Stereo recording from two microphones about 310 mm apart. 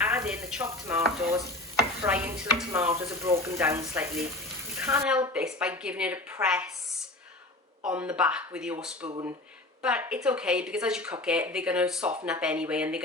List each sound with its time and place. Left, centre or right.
0.0 s speech: centre
7.9 s speech: centre
9.0 s speech: centre
9.8 s speech: centre